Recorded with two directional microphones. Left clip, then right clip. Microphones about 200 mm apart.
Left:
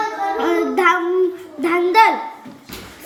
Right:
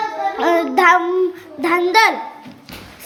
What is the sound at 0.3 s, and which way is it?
Music, 35° right (ahead or behind).